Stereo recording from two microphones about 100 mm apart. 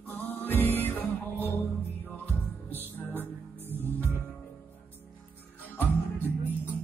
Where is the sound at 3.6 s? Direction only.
20° right (ahead or behind).